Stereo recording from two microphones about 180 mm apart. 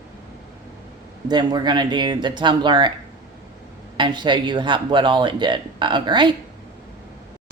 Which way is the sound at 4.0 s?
25° right (ahead or behind).